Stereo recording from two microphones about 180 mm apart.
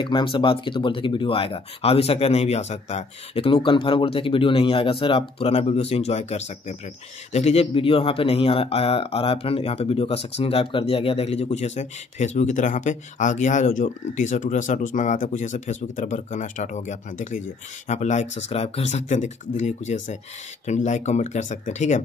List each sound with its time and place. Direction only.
0.0 s speech: 25° left (ahead or behind)